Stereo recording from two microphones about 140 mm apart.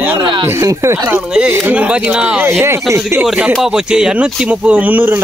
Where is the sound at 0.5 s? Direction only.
20° right (ahead or behind).